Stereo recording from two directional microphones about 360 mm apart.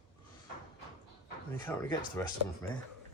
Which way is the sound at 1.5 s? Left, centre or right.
Centre.